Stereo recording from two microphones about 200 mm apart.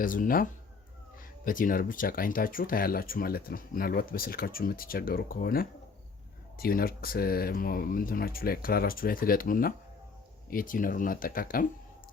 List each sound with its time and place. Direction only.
0.0 s speech: 45° left (ahead or behind)
1.5 s speech: 45° left (ahead or behind)